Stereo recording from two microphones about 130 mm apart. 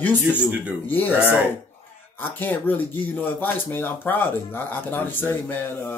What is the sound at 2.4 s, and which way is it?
Speech, 15° left (ahead or behind).